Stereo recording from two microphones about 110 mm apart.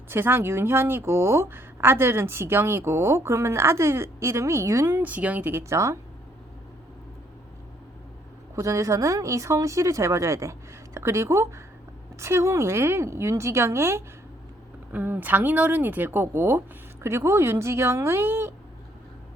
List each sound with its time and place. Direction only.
0.1 s speech: 20° right (ahead or behind)
8.5 s speech: 30° right (ahead or behind)